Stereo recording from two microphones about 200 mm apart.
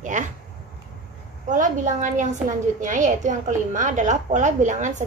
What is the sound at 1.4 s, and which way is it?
A woman's voice, 40° right (ahead or behind).